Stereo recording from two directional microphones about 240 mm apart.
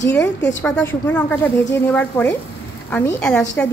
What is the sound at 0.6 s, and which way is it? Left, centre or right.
A woman's voice, centre.